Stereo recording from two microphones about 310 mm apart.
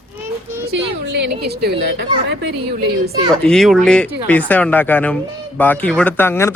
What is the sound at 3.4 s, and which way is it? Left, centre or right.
Speech, centre.